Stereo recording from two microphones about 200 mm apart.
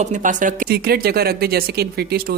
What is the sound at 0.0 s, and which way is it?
A man's voice, 40° right (ahead or behind).